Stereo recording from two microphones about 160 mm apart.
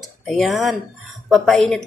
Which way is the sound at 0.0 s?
Centre (ahead or behind).